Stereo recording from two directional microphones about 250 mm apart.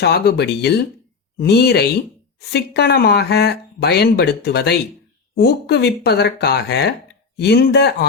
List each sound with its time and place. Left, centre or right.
0.0 s speech: left